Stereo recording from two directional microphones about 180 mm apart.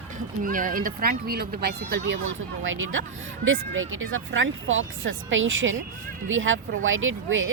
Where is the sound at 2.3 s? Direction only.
90° right.